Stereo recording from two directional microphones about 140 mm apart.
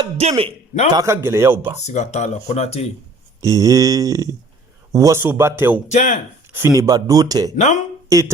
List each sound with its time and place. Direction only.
0.2 s a man's voice: 45° right (ahead or behind)
0.9 s speech: 20° right (ahead or behind)
1.8 s speech: 55° left (ahead or behind)
3.4 s speech: 25° right (ahead or behind)
5.9 s speech: 55° left (ahead or behind)
6.5 s speech: 20° right (ahead or behind)
7.5 s speech: 60° left (ahead or behind)
8.1 s speech: 20° right (ahead or behind)